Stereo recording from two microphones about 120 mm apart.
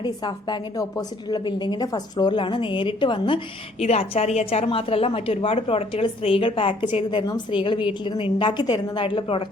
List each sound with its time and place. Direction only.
0.0 s a woman's voice: 40° left (ahead or behind)
3.8 s a woman's voice: 60° left (ahead or behind)